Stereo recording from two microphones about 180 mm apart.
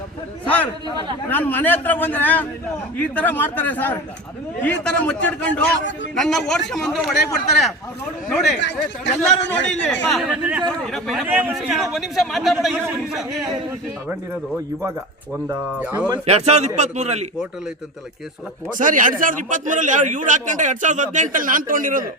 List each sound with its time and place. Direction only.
0.4 s a man's voice: 10° left (ahead or behind)
8.6 s speech: 80° left
9.6 s a man's voice: 5° left (ahead or behind)
15.4 s speech: 5° right (ahead or behind)
16.2 s a man's voice: 35° right (ahead or behind)
18.8 s a man's voice: 45° right (ahead or behind)